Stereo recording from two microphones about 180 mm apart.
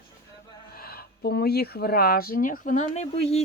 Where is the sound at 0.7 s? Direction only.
60° left (ahead or behind).